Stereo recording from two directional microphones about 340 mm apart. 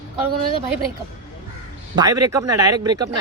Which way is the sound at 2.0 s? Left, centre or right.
Centre.